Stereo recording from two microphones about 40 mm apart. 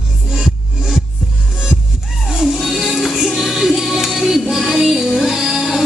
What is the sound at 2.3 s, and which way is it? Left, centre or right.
Music, centre.